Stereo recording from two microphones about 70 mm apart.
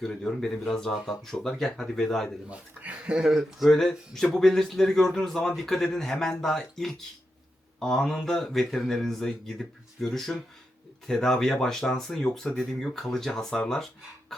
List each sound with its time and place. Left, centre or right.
0.0 s speech: centre
2.5 s speech: centre
3.6 s speech: centre